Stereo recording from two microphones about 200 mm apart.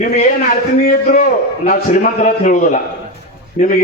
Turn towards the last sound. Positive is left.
turn(degrees=40)  # may be behind; listen again after turning